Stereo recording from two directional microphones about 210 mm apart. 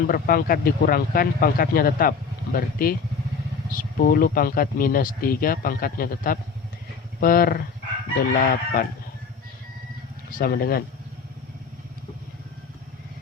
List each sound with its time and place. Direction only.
0.1 s speech: 45° left (ahead or behind)
10.3 s speech: 45° left (ahead or behind)